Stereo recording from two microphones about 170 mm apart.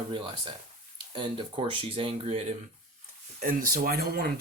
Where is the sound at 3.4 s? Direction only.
55° right (ahead or behind).